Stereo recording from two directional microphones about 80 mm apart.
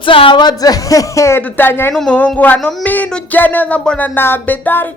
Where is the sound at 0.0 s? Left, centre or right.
Left.